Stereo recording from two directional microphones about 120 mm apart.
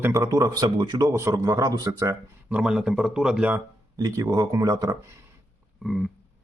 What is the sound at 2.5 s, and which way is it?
Speech, 5° right (ahead or behind).